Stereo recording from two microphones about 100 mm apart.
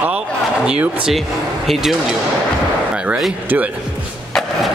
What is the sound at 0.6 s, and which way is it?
Speech, 10° right (ahead or behind).